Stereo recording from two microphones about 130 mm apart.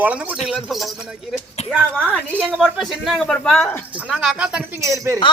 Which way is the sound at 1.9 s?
10° left (ahead or behind).